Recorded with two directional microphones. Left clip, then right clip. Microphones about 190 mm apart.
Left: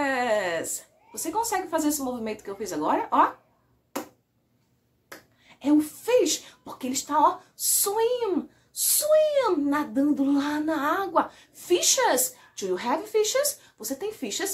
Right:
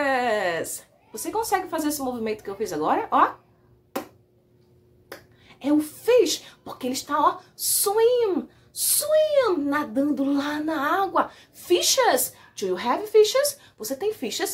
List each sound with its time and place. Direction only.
0.0 s a woman's voice: centre (ahead or behind)
3.9 s a sound: centre (ahead or behind)
5.1 s a woman's voice: centre (ahead or behind)